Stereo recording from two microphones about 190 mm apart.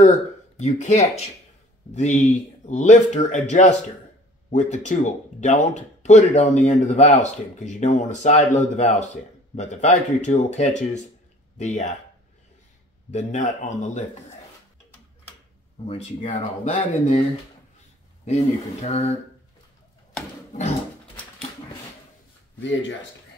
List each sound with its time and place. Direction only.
0.0 s speech: 40° left (ahead or behind)
2.2 s speech: 40° left (ahead or behind)
13.1 s speech: 40° left (ahead or behind)
15.9 s speech: 30° left (ahead or behind)
18.2 s speech: 35° left (ahead or behind)
22.6 s speech: 75° left (ahead or behind)